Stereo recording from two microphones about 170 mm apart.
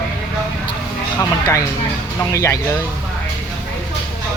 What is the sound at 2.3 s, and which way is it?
Speech, 15° left (ahead or behind).